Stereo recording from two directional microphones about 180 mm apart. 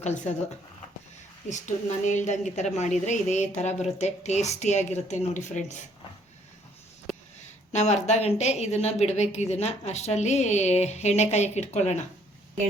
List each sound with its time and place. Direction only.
1.5 s a woman's voice: 40° left (ahead or behind)
7.1 s a sound: centre (ahead or behind)
7.7 s a woman's voice: 40° left (ahead or behind)